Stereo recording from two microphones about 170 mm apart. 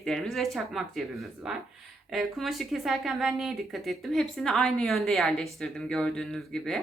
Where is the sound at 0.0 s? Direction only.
Centre (ahead or behind).